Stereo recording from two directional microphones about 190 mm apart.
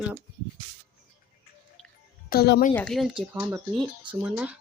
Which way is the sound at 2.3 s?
55° left (ahead or behind).